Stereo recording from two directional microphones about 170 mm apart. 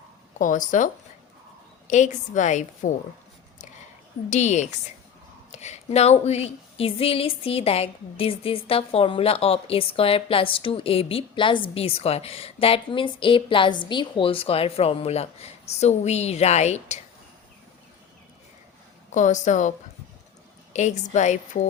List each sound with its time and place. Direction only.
0.3 s a woman's voice: 50° left (ahead or behind)
1.9 s a woman's voice: 45° left (ahead or behind)
4.3 s a woman's voice: 45° left (ahead or behind)
19.1 s a woman's voice: 45° left (ahead or behind)
20.7 s a woman's voice: 45° left (ahead or behind)